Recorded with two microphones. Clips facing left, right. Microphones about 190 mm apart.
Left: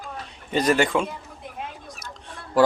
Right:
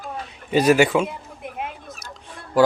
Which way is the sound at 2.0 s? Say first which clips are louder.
Right 1 dB; centre (ahead or behind).